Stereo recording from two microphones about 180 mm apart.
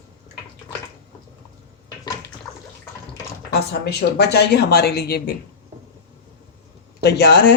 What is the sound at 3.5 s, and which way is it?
Speech, 70° left (ahead or behind).